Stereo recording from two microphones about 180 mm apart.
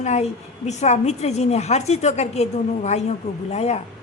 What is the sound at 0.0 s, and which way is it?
Speech, 40° left (ahead or behind).